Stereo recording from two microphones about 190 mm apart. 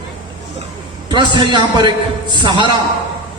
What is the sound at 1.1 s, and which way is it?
A man's voice, 25° right (ahead or behind).